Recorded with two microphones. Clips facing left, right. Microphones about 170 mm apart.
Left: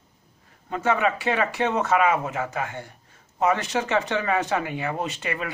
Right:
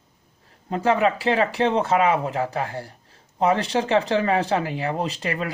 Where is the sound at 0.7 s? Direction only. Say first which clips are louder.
Right 3 dB; 35° right (ahead or behind).